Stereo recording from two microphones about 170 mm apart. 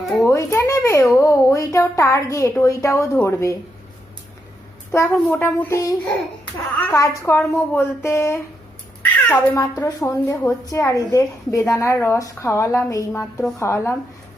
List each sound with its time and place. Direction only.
0.3 s a woman's voice: 15° left (ahead or behind)
4.9 s a woman's voice: 15° left (ahead or behind)